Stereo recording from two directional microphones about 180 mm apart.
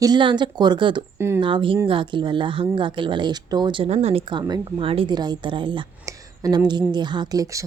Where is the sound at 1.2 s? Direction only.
15° right (ahead or behind).